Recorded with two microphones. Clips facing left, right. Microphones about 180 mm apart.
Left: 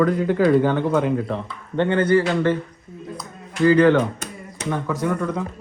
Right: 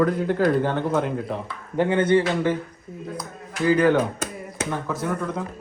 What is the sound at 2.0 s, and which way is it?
Speech, 25° right (ahead or behind).